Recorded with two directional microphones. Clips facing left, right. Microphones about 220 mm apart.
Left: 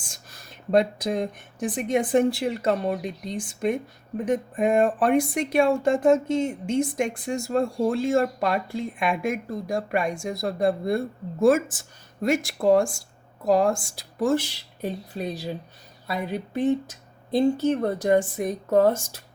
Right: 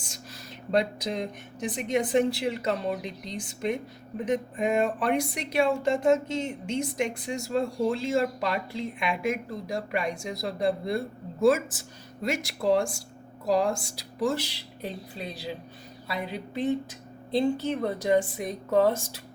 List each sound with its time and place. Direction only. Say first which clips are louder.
0.0 s speech: right 4 dB; 50° left (ahead or behind)